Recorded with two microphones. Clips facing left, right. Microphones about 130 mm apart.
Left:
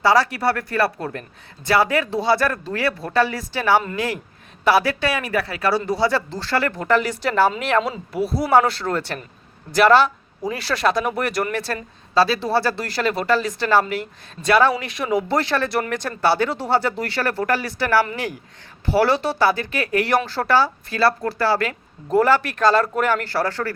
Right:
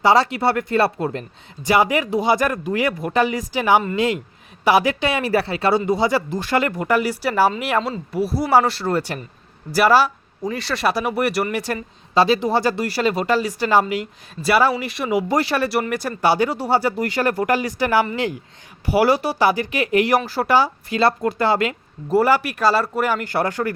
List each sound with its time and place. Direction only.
0.0 s speech: 20° right (ahead or behind)
22.1 s speech: 10° right (ahead or behind)